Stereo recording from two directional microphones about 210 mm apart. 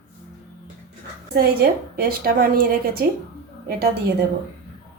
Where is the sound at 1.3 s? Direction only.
45° right (ahead or behind).